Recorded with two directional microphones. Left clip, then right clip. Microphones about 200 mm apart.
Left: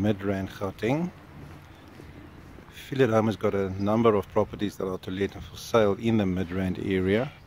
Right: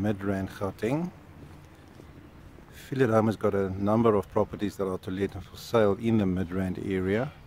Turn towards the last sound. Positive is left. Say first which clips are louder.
# left 3 dB
turn(degrees=5)  # may be behind; listen again after turning